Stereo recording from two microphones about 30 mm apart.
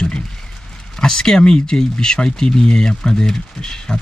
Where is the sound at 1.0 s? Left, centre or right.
Left.